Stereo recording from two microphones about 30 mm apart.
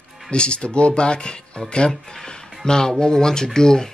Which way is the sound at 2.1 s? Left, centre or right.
Left.